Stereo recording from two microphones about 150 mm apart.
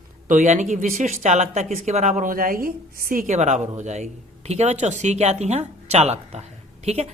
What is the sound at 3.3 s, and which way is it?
Speech, 50° right (ahead or behind).